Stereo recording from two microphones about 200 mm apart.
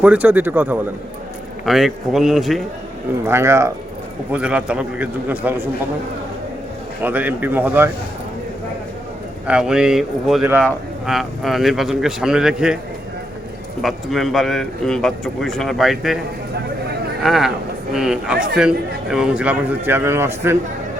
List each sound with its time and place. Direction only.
0.0 s a man's voice: 5° right (ahead or behind)
3.2 s a man's voice: 15° right (ahead or behind)
7.0 s a man's voice: 10° right (ahead or behind)
9.5 s speech: 5° right (ahead or behind)
13.8 s speech: centre (ahead or behind)
17.2 s a man's voice: centre (ahead or behind)